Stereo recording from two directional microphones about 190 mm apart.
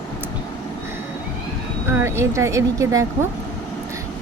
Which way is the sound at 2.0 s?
15° right (ahead or behind).